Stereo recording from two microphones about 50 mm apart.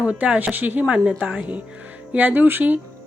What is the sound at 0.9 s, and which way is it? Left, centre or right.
Speech, centre.